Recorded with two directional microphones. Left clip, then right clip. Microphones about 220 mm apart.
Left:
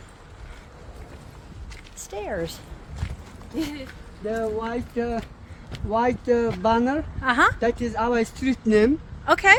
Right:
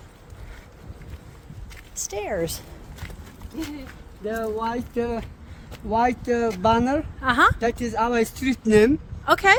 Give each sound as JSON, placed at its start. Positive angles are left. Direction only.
{"t": 2.0, "sound": "speech", "side_deg": -35}
{"t": 4.3, "sound": "speech", "side_deg": -45}
{"t": 7.2, "sound": "speech", "side_deg": -15}
{"t": 7.6, "sound": "speech", "side_deg": -55}
{"t": 9.2, "sound": "speech", "side_deg": -15}